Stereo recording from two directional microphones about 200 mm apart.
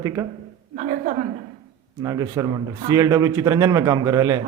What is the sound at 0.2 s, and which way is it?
Speech, 15° right (ahead or behind).